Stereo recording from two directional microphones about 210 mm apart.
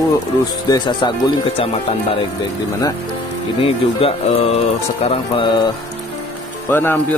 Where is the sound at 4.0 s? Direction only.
25° left (ahead or behind).